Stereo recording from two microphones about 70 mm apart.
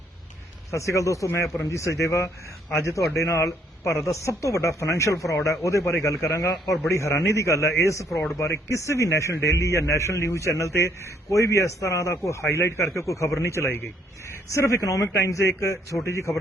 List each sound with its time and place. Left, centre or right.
0.7 s a man's voice: left
8.1 s speech: centre
8.4 s a man's voice: left